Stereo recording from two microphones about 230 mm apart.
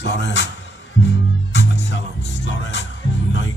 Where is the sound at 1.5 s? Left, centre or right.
Left.